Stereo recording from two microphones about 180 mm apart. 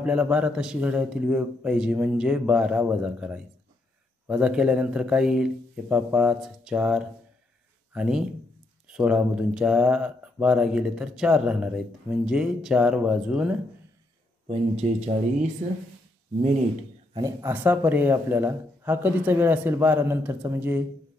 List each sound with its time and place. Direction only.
0.0 s speech: 5° right (ahead or behind)
14.5 s speech: 35° right (ahead or behind)
15.6 s speech: 50° right (ahead or behind)
17.1 s speech: 20° right (ahead or behind)